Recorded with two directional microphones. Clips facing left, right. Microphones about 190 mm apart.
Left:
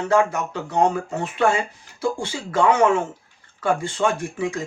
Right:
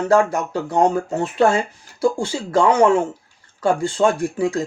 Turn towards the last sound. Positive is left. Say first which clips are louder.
# right 5 dB
turn(degrees=-35)  # may be behind; listen again after turning